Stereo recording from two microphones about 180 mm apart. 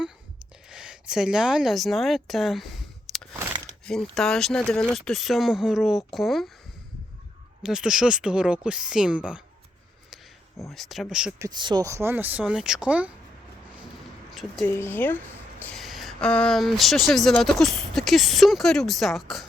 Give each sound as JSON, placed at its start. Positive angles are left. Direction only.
{"t": 0.7, "sound": "a woman's voice", "side_deg": -5}
{"t": 3.1, "sound": "a sound", "side_deg": 0}
{"t": 3.8, "sound": "speech", "side_deg": 5}
{"t": 7.6, "sound": "speech", "side_deg": -5}
{"t": 10.7, "sound": "speech", "side_deg": 0}
{"t": 11.3, "sound": "speech", "side_deg": -20}
{"t": 14.3, "sound": "speech", "side_deg": 0}
{"t": 14.7, "sound": "speech", "side_deg": 15}